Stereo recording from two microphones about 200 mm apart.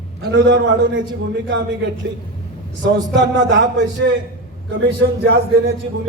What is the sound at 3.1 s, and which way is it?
Speech, 65° right (ahead or behind).